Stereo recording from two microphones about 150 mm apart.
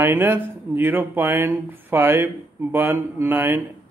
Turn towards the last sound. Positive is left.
turn(degrees=-15)  # may be behind; listen again after turning